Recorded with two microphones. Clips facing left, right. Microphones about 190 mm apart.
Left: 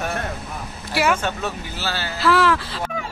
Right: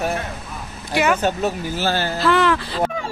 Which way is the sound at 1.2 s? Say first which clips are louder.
Right 6 dB; 45° right (ahead or behind).